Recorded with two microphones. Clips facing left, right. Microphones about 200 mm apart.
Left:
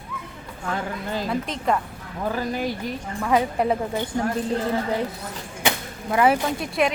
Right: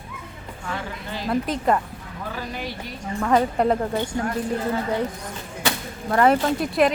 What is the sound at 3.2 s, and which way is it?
Speech, 5° left (ahead or behind).